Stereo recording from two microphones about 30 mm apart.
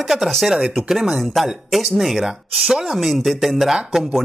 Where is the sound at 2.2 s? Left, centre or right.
Centre.